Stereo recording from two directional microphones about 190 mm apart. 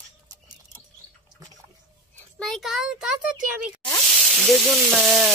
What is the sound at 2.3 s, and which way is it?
Speech, centre (ahead or behind).